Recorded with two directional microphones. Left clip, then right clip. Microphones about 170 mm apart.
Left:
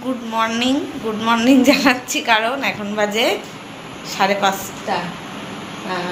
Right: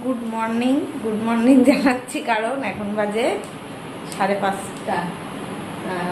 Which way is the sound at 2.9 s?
20° left (ahead or behind).